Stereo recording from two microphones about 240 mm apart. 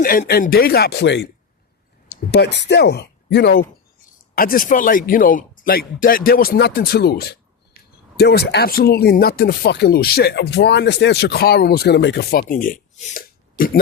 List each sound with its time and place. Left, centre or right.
0.0 s speech: left